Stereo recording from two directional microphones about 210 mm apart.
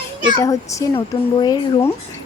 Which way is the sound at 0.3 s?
15° left (ahead or behind).